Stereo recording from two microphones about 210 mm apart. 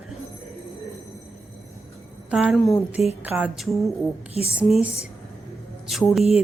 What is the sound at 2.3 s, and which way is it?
Speech, 5° right (ahead or behind).